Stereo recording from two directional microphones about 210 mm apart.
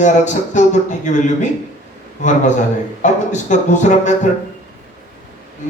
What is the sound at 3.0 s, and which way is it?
A man's voice, 35° left (ahead or behind).